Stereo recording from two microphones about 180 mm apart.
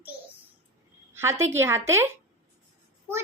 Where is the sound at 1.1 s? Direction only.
15° right (ahead or behind).